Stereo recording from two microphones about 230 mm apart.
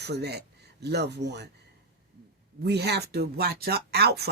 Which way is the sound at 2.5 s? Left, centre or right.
Right.